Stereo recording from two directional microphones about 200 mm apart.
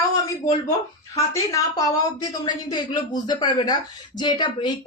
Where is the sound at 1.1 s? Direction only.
15° left (ahead or behind).